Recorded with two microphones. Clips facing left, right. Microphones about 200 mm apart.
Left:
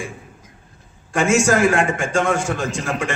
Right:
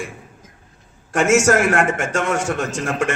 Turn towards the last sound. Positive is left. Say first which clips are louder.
# right 2 dB
turn(degrees=-70)  # may be behind; listen again after turning